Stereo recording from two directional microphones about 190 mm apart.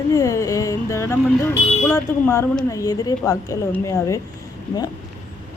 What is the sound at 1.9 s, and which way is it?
A woman's voice, 15° left (ahead or behind).